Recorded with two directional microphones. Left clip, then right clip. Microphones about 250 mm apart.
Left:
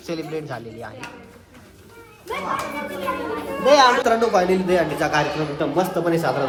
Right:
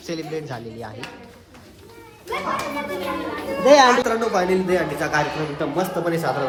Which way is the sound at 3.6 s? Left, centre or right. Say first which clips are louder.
Right 1 dB; right.